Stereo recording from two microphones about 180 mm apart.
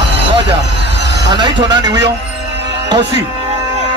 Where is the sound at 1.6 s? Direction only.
25° right (ahead or behind).